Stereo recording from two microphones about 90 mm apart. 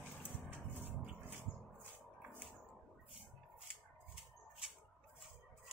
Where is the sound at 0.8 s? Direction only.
20° right (ahead or behind).